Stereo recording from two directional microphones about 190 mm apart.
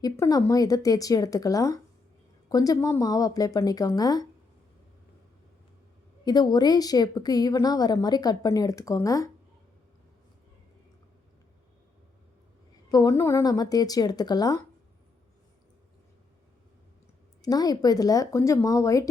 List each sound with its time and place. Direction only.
0.0 s a woman's voice: 20° left (ahead or behind)
6.2 s a woman's voice: 20° left (ahead or behind)
12.9 s a woman's voice: 20° left (ahead or behind)
17.4 s a woman's voice: 20° left (ahead or behind)